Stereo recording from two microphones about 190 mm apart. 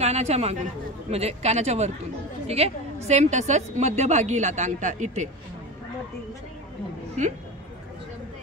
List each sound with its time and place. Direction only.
0.0 s a woman's voice: 35° right (ahead or behind)